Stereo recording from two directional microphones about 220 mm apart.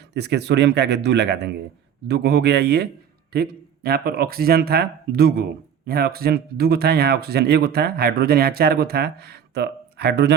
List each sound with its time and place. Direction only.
0.1 s speech: 50° right (ahead or behind)